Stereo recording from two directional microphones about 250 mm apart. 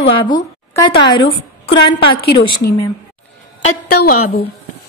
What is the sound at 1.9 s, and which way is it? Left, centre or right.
Speech, left.